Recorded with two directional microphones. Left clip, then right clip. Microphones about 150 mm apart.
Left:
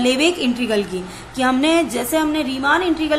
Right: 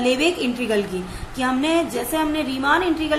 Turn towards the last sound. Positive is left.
turn(degrees=15)  # may be behind; listen again after turning